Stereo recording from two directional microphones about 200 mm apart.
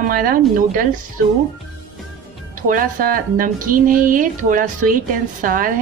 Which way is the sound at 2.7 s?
45° right (ahead or behind).